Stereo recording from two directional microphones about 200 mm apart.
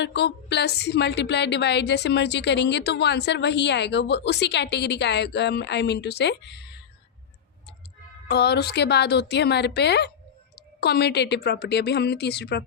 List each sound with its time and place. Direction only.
0.0 s a woman's voice: 55° left (ahead or behind)
8.3 s a woman's voice: 55° left (ahead or behind)